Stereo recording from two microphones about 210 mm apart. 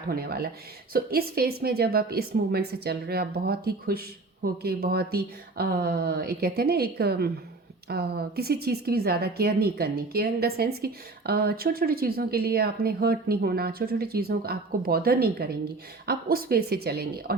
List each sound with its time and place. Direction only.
0.1 s a woman's voice: 45° right (ahead or behind)